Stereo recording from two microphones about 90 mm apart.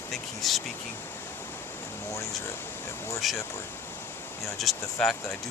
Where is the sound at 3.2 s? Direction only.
Centre (ahead or behind).